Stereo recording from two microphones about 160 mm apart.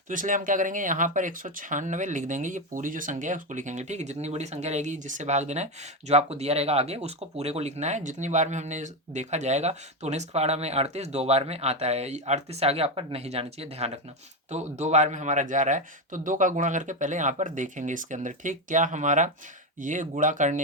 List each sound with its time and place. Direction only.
0.1 s speech: 55° right (ahead or behind)